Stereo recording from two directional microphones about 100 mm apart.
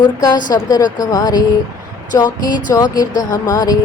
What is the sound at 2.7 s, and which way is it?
A woman's voice, 40° left (ahead or behind).